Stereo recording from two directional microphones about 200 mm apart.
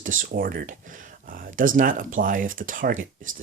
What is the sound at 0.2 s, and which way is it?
Speech, 45° right (ahead or behind).